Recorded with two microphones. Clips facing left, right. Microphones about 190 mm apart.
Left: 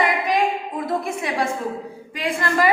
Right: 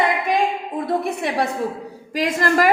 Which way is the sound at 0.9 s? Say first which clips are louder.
Right 3 dB; 35° right (ahead or behind).